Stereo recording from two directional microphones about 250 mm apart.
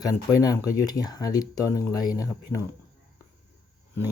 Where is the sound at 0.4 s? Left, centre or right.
Centre.